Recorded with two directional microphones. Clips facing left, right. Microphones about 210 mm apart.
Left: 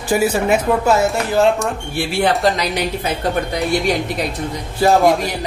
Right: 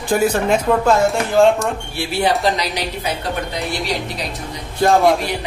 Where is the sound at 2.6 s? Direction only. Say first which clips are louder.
Left 3 dB; 50° left (ahead or behind).